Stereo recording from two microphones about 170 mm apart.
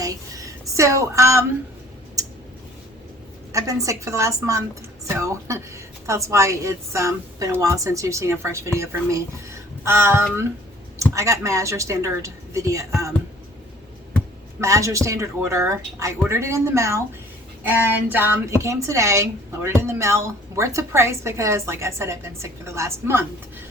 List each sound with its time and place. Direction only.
0.0 s speech: 20° right (ahead or behind)
3.5 s a woman's voice: 20° right (ahead or behind)
14.6 s a woman's voice: 15° right (ahead or behind)